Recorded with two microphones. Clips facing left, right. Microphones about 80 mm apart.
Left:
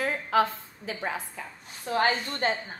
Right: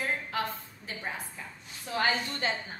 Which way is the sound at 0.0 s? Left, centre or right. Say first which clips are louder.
Left 7 dB; left.